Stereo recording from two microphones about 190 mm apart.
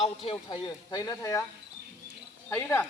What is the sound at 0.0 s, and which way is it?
Speech, 30° left (ahead or behind).